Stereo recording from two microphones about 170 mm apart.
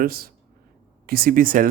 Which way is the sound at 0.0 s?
60° right (ahead or behind).